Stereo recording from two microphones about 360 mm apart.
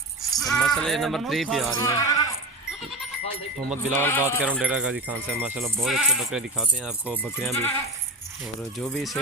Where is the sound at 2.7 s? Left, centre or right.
Centre.